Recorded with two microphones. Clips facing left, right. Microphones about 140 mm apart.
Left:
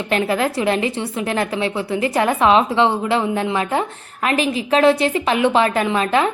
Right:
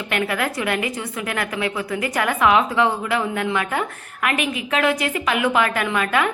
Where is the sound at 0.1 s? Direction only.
30° left (ahead or behind).